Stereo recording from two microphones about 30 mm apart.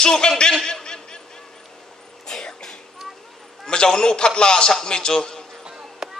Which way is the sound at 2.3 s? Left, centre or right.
Left.